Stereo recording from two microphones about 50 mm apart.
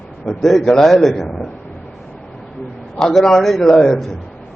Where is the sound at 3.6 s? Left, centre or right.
Centre.